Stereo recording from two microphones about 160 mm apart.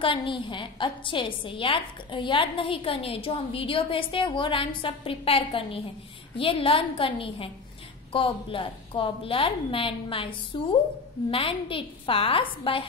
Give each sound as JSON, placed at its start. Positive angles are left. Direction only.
{"t": 0.0, "sound": "a woman's voice", "side_deg": 30}